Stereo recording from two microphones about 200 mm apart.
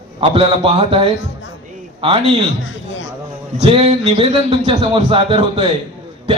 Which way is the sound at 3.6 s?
30° right (ahead or behind).